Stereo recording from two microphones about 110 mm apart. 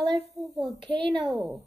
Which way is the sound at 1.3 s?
10° right (ahead or behind).